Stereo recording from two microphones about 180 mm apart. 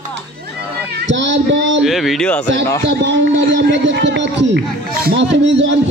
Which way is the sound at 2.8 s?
85° right.